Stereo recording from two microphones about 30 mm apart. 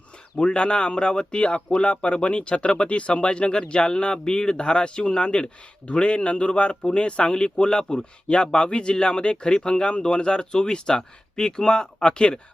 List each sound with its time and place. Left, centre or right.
0.3 s a man's voice: left